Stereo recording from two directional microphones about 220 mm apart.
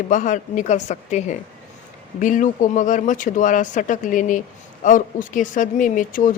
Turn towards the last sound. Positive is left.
turn(degrees=35)  # may be behind; listen again after turning